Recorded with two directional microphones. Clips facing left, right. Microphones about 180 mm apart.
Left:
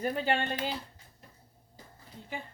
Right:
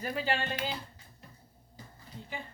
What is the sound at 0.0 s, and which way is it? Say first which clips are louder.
Speech: left 3 dB; 45° left (ahead or behind).